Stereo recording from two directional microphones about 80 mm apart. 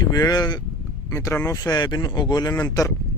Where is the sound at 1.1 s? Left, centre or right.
Left.